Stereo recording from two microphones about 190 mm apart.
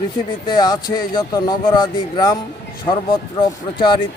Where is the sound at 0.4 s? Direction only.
20° left (ahead or behind).